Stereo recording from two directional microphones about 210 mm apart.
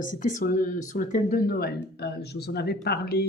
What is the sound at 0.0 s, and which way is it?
Speech, 40° left (ahead or behind).